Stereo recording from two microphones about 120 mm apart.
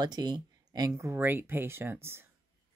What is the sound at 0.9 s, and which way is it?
Speech, 20° right (ahead or behind).